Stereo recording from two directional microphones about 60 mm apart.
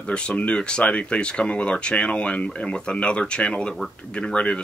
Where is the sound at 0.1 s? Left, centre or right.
Centre.